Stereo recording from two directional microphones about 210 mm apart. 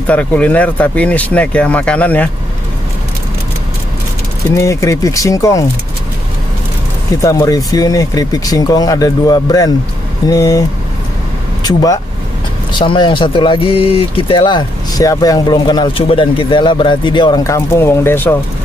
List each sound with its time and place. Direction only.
0.0 s speech: 5° left (ahead or behind)
4.5 s speech: 15° left (ahead or behind)
7.2 s speech: 15° left (ahead or behind)
11.6 s speech: 15° left (ahead or behind)